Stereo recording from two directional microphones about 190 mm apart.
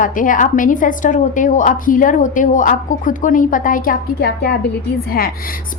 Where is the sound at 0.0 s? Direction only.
45° left (ahead or behind).